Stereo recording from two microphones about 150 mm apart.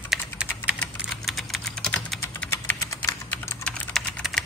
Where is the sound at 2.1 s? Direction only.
15° left (ahead or behind).